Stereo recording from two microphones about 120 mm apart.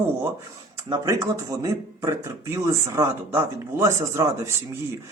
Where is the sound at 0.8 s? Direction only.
30° right (ahead or behind).